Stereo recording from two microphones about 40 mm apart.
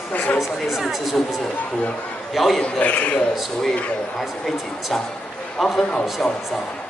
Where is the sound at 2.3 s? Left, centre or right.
Centre.